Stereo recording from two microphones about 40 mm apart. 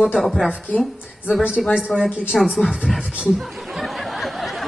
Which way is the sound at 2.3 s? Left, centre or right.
Centre.